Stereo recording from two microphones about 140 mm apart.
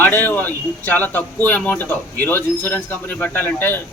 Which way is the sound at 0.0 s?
15° left (ahead or behind).